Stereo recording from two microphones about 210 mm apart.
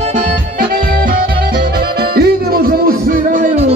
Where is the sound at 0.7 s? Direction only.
45° right (ahead or behind).